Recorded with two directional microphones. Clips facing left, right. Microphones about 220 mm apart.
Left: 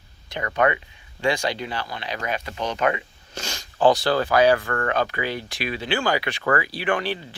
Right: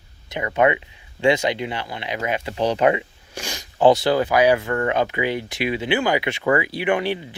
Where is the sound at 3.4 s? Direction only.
15° right (ahead or behind).